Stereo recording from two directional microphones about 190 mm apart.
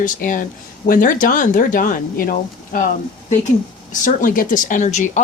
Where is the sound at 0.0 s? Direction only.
45° left (ahead or behind).